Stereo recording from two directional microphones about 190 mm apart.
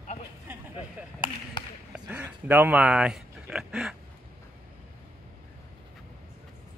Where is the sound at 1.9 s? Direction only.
5° right (ahead or behind).